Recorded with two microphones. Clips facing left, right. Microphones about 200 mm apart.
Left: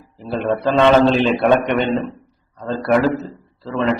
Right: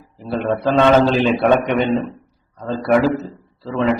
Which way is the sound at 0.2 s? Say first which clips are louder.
Even; centre (ahead or behind).